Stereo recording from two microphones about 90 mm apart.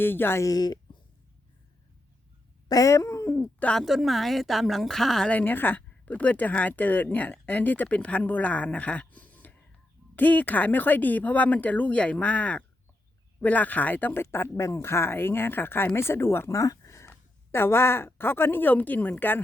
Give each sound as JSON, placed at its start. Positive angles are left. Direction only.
{"t": 0.0, "sound": "speech", "side_deg": 25}
{"t": 0.4, "sound": "speech", "side_deg": 45}
{"t": 2.6, "sound": "cat", "side_deg": 40}
{"t": 3.8, "sound": "speech", "side_deg": 0}
{"t": 5.3, "sound": "speech", "side_deg": 20}